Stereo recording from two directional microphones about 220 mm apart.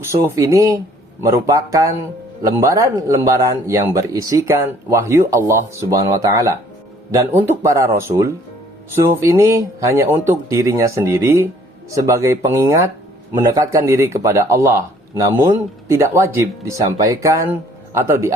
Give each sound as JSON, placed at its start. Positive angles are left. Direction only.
{"t": 0.0, "sound": "speech", "side_deg": -15}